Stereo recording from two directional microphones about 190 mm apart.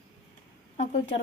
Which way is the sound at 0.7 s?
35° left (ahead or behind).